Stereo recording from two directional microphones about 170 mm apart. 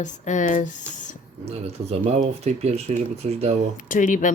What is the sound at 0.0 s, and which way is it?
Speech, 45° left (ahead or behind).